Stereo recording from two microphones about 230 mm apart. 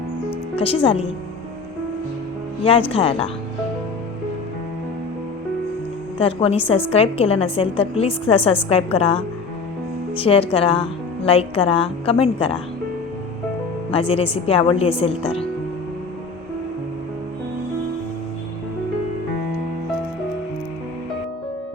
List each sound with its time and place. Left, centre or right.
0.5 s a woman's voice: left
2.6 s a woman's voice: left
6.1 s a woman's voice: left
13.9 s a woman's voice: left